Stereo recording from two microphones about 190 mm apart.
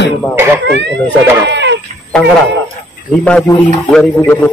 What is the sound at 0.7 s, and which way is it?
Speech, 65° right (ahead or behind).